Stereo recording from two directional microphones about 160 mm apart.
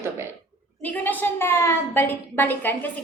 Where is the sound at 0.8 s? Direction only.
10° left (ahead or behind).